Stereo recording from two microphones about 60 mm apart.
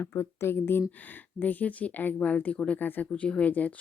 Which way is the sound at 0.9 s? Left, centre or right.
Left.